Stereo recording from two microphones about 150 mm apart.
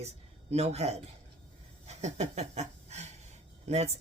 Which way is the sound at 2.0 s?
50° right (ahead or behind).